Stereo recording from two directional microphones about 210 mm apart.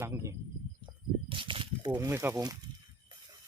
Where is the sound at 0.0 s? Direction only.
10° right (ahead or behind).